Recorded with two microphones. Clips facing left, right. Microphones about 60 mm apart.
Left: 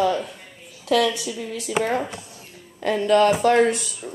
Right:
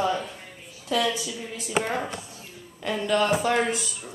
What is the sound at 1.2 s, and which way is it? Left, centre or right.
Speech, left.